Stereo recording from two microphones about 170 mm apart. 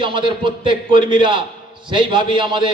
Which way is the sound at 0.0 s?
30° right (ahead or behind).